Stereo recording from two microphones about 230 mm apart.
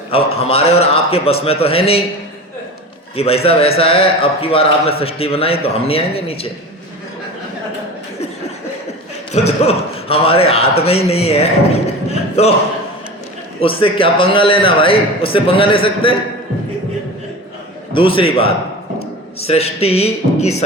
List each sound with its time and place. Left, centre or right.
0.1 s a man's voice: left
3.2 s a man's voice: left
9.5 s a man's voice: left
13.6 s a man's voice: left
17.9 s a man's voice: left